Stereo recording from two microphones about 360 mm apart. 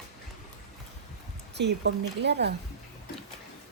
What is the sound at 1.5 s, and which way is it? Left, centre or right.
Speech, right.